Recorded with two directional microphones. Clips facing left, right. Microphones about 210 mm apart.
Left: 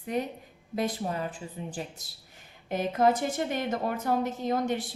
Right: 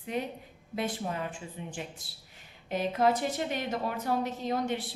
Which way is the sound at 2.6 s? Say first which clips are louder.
Left 2 dB; 50° left (ahead or behind).